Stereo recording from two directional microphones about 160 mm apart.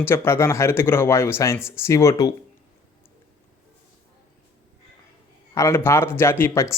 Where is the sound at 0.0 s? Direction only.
15° left (ahead or behind).